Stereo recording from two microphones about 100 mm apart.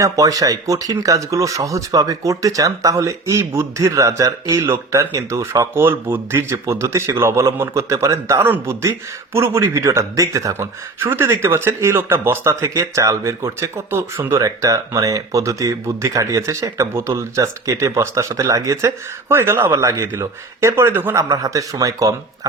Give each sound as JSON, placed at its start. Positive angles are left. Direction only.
{"t": 0.0, "sound": "speech", "side_deg": -35}
{"t": 8.4, "sound": "speech", "side_deg": -20}
{"t": 21.2, "sound": "speech", "side_deg": -35}